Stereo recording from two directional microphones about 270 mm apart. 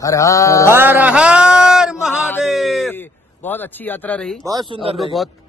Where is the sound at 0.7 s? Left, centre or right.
Centre.